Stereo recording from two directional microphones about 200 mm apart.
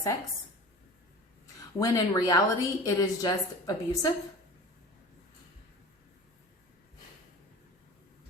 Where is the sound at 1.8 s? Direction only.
20° left (ahead or behind).